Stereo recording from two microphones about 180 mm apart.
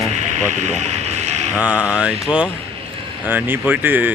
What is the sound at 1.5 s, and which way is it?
Speech, 10° right (ahead or behind).